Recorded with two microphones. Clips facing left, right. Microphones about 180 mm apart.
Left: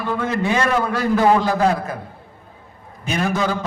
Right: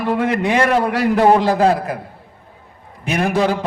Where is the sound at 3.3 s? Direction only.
30° right (ahead or behind).